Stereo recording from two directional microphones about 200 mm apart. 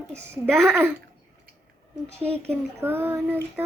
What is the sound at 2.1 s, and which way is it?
Speech, 30° right (ahead or behind).